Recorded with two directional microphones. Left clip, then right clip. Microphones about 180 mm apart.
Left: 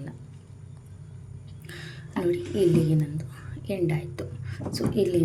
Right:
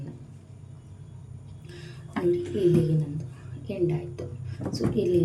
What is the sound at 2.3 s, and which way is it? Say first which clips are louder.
A woman's voice: left 1 dB; 20° left (ahead or behind).